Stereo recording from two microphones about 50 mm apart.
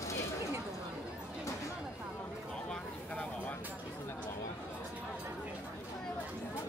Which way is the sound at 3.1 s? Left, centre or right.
Left.